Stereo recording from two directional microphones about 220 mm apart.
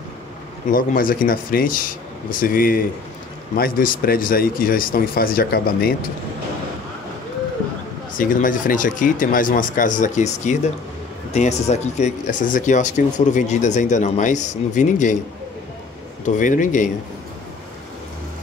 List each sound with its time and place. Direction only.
0.7 s speech: 40° left (ahead or behind)
8.2 s speech: 35° left (ahead or behind)
16.3 s speech: 35° left (ahead or behind)